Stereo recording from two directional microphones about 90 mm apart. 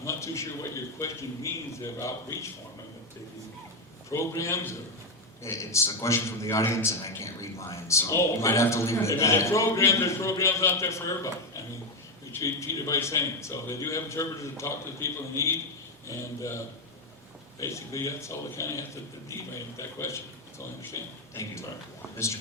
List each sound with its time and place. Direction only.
0.0 s a man's voice: 35° left (ahead or behind)
4.1 s a man's voice: 35° left (ahead or behind)